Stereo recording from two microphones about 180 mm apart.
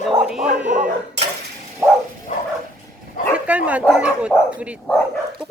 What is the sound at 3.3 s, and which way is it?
Dog, 5° right (ahead or behind).